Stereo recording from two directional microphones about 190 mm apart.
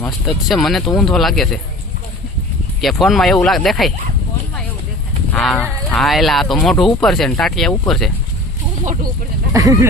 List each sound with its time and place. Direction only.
0.0 s speech: centre (ahead or behind)
2.8 s speech: centre (ahead or behind)
5.3 s speech: 5° left (ahead or behind)
9.5 s speech: 20° right (ahead or behind)